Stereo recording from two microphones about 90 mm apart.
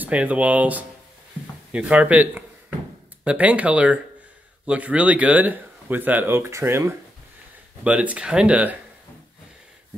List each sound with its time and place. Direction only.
0.0 s speech: 15° right (ahead or behind)
7.8 s speech: 15° right (ahead or behind)